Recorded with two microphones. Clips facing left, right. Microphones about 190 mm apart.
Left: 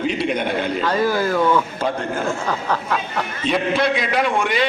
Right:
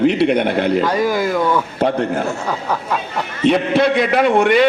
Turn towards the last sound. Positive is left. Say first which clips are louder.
# right 7 dB
turn(degrees=-60)  # may be behind; listen again after turning